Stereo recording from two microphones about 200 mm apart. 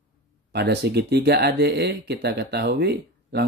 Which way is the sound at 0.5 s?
55° right (ahead or behind).